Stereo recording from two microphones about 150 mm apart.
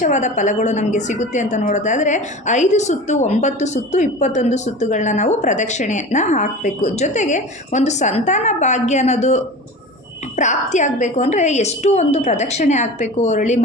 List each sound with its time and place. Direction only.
0.0 s a woman's voice: 55° left (ahead or behind)